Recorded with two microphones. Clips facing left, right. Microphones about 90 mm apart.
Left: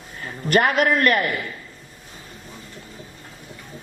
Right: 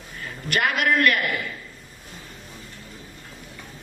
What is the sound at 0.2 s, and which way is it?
A man's voice, 35° left (ahead or behind).